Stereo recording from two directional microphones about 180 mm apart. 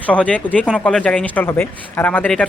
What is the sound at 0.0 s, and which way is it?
Speech, 5° left (ahead or behind).